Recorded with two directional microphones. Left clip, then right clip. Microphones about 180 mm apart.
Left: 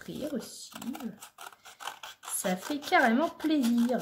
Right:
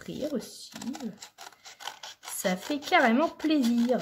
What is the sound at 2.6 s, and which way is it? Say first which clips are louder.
Speech: right 1 dB; 15° right (ahead or behind).